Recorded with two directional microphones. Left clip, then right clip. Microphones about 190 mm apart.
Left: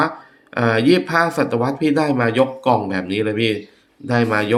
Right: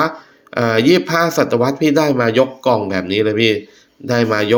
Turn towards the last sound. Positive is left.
turn(degrees=-15)  # may be behind; listen again after turning